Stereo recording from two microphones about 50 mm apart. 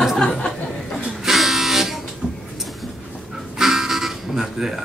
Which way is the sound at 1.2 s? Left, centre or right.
Centre.